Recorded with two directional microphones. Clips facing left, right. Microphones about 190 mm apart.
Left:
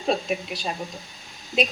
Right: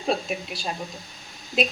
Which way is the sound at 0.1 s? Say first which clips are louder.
Left 2 dB; centre (ahead or behind).